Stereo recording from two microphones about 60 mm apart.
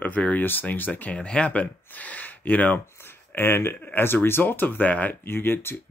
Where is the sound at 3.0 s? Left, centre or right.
Left.